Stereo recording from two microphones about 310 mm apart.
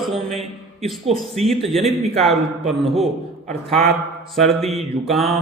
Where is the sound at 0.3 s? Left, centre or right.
Centre.